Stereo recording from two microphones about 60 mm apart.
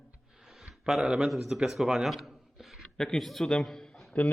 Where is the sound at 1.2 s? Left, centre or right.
Centre.